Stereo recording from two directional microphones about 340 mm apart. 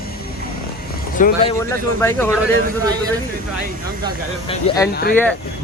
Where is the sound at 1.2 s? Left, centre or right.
Left.